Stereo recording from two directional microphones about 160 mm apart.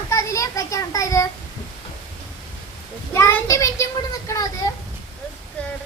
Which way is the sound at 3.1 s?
20° left (ahead or behind).